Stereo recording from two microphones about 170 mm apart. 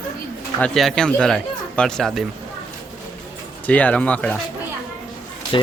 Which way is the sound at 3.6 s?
10° left (ahead or behind).